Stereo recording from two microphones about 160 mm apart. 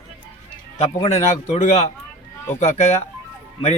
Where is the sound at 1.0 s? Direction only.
45° left (ahead or behind).